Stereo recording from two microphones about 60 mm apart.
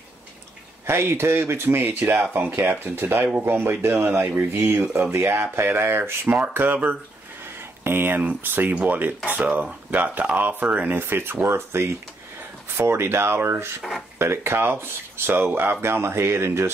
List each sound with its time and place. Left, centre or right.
0.8 s speech: right
6.2 s speech: right